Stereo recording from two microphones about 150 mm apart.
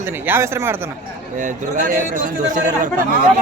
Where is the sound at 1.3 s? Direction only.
60° right (ahead or behind).